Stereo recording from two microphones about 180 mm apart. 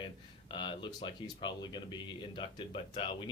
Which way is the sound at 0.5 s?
25° left (ahead or behind).